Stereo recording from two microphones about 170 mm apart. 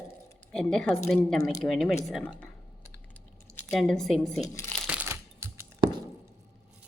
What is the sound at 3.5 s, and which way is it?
Speech, 5° left (ahead or behind).